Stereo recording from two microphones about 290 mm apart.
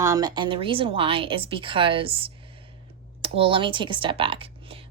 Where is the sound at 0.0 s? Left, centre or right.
Centre.